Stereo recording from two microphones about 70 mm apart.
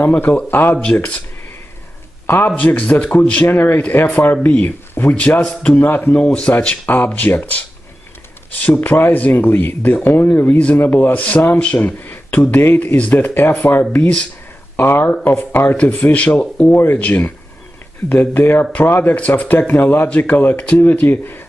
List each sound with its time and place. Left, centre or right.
0.5 s speech: left
2.2 s speech: left
6.1 s speech: centre; by 13.8 s left
13.9 s speech: left
14.8 s speech: left